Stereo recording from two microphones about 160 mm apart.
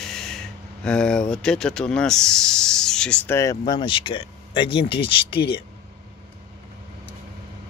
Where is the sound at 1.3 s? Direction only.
5° left (ahead or behind); by 5.5 s 35° left (ahead or behind).